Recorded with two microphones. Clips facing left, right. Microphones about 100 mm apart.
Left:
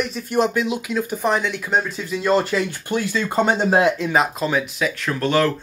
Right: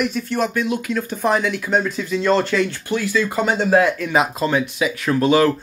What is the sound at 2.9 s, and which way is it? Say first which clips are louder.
Speech: right 2 dB; 25° left (ahead or behind).